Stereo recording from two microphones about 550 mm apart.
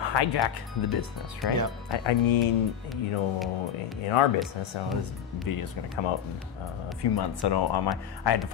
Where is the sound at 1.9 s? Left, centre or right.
Left.